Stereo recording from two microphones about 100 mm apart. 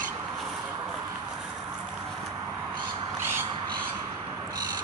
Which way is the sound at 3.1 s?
25° right (ahead or behind).